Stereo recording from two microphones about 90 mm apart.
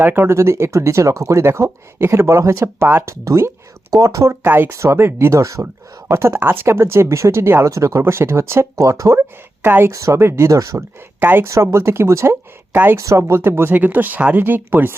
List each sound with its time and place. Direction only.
0.0 s speech: 25° right (ahead or behind)
4.4 s speech: 25° right (ahead or behind)
4.7 s speech: 35° right (ahead or behind)
9.9 s speech: 35° right (ahead or behind)
11.2 s speech: 20° right (ahead or behind)
11.4 s speech: 35° right (ahead or behind)
13.0 s speech: 35° right (ahead or behind)